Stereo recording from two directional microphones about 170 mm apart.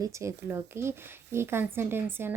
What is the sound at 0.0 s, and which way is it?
Speech, 15° right (ahead or behind).